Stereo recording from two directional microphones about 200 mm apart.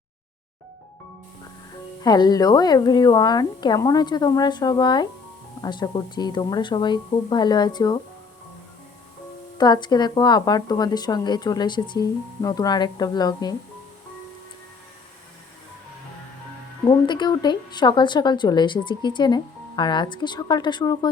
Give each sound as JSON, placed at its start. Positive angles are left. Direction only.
{"t": 2.0, "sound": "a woman's voice", "side_deg": 20}
{"t": 9.6, "sound": "a woman's voice", "side_deg": 20}
{"t": 16.9, "sound": "a woman's voice", "side_deg": 20}